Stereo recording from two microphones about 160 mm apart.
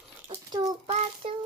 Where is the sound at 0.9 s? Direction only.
40° right (ahead or behind).